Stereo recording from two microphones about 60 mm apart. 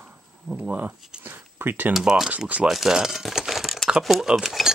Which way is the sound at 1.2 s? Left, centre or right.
Right.